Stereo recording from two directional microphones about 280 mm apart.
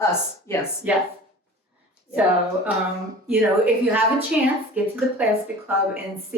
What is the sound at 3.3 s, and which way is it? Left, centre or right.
Speech, centre.